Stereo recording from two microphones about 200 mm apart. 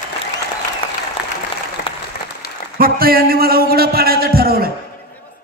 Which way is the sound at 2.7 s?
45° right (ahead or behind).